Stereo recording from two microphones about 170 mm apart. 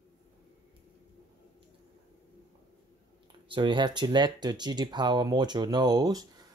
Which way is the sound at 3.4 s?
30° right (ahead or behind).